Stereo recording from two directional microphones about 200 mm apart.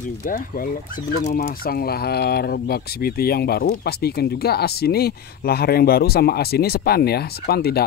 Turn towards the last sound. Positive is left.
turn(degrees=50)  # may be behind; listen again after turning